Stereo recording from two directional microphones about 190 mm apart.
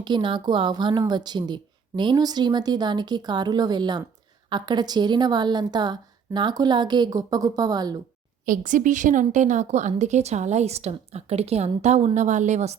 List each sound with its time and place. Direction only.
0.0 s speech: 25° right (ahead or behind)
8.4 s a woman's voice: 45° right (ahead or behind)